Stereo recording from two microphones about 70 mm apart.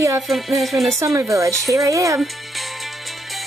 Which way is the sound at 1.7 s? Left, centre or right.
Right.